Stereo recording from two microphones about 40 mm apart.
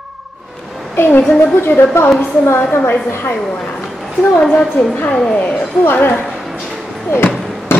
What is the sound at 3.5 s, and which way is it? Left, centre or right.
Speech, centre.